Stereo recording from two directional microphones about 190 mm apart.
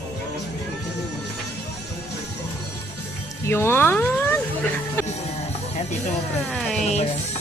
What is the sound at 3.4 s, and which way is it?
Speech, 10° left (ahead or behind).